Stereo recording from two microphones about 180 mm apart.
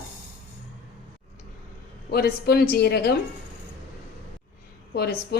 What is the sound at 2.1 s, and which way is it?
Speech, 60° left (ahead or behind).